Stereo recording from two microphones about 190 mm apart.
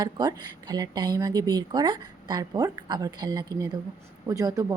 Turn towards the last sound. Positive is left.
turn(degrees=-20)  # may be behind; listen again after turning